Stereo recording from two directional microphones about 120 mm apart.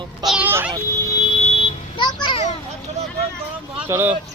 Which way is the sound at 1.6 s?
50° left (ahead or behind).